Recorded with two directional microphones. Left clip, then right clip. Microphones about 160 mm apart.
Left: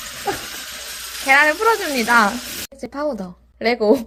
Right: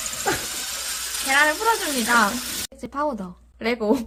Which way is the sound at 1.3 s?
25° left (ahead or behind).